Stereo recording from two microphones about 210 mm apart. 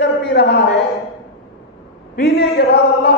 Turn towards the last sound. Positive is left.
turn(degrees=50)  # may be behind; listen again after turning